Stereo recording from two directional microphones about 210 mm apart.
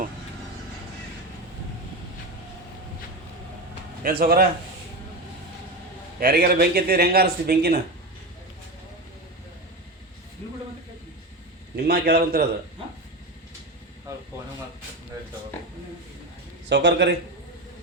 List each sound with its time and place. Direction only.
4.0 s a man's voice: 45° right (ahead or behind)
6.1 s a man's voice: 45° right (ahead or behind)
11.8 s a man's voice: 50° right (ahead or behind)
16.6 s a man's voice: 55° right (ahead or behind)